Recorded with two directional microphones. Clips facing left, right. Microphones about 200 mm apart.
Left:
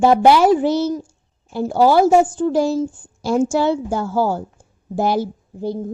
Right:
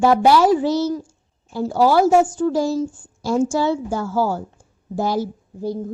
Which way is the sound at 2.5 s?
60° left (ahead or behind).